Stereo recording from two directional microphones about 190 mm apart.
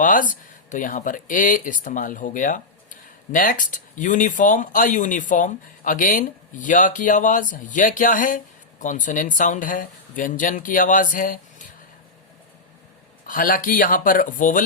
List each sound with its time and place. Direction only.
0.0 s speech: 45° left (ahead or behind)
13.2 s speech: 45° left (ahead or behind)